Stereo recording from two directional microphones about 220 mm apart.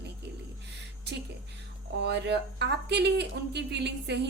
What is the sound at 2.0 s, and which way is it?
Speech, 50° right (ahead or behind).